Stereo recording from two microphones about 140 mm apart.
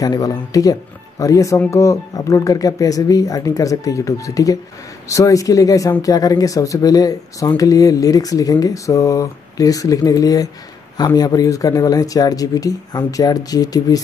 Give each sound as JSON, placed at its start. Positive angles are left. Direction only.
{"t": 0.0, "sound": "speech", "side_deg": 25}